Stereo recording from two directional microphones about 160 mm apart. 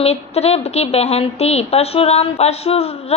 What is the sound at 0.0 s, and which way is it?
A woman's voice, 40° left (ahead or behind).